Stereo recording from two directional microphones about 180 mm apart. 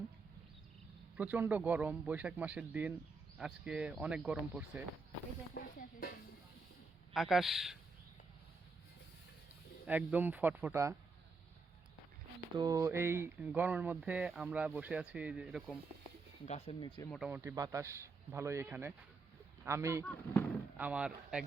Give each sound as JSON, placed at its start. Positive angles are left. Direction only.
{"t": 1.1, "sound": "speech", "side_deg": -10}
{"t": 5.6, "sound": "a sound", "side_deg": 55}
{"t": 7.1, "sound": "a man's voice", "side_deg": 0}
{"t": 9.8, "sound": "speech", "side_deg": -10}
{"t": 12.5, "sound": "speech", "side_deg": -20}
{"t": 16.5, "sound": "speech", "side_deg": 40}
{"t": 16.8, "sound": "speech", "side_deg": 25}
{"t": 17.2, "sound": "speech", "side_deg": -15}
{"t": 20.1, "sound": "speech", "side_deg": 10}
{"t": 20.7, "sound": "speech", "side_deg": -10}